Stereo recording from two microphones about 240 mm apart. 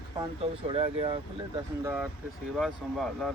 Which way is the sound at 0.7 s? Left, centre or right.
Right.